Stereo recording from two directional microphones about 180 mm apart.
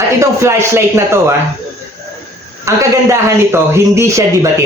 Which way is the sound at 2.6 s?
15° right (ahead or behind).